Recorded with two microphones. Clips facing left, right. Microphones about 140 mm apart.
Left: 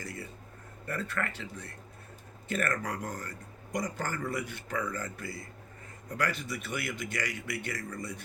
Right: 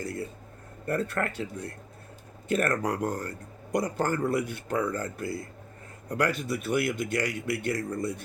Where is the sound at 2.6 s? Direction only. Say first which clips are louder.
Right 5 dB; 65° right (ahead or behind).